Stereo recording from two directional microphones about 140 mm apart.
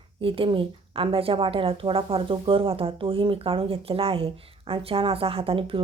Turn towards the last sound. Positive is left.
turn(degrees=-40)  # may be behind; listen again after turning